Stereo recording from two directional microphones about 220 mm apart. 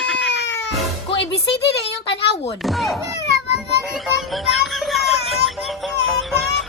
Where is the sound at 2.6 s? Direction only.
Centre (ahead or behind).